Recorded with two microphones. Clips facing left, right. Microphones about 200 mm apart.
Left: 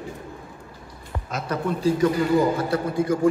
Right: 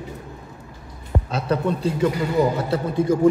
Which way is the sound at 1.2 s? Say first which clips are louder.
Right 3 dB; 30° right (ahead or behind).